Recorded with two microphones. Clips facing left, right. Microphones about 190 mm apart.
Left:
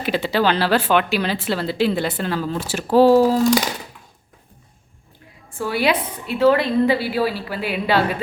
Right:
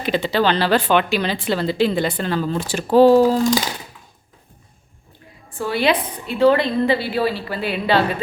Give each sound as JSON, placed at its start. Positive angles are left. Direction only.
{"t": 0.0, "sound": "speech", "side_deg": 5}
{"t": 5.5, "sound": "a woman's voice", "side_deg": 10}